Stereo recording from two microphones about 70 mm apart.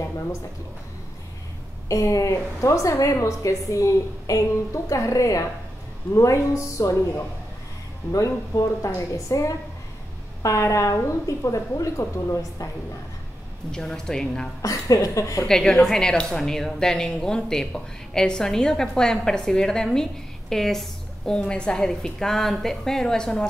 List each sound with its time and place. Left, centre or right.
1.9 s a woman's voice: left
13.7 s speech: centre
14.6 s a woman's voice: left
15.4 s speech: centre